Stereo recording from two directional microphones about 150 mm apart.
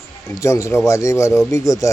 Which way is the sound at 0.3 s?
20° left (ahead or behind).